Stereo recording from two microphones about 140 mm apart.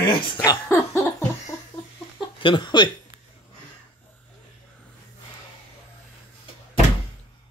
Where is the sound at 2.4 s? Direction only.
35° left (ahead or behind).